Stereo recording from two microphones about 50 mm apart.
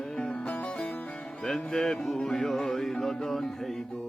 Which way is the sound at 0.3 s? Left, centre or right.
Left.